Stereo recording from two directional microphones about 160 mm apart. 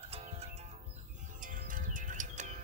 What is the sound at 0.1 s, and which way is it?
Music, 40° right (ahead or behind).